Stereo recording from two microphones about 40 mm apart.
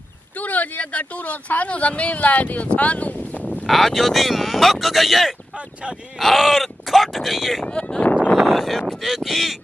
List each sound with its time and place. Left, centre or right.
0.4 s speech: left
3.6 s speech: centre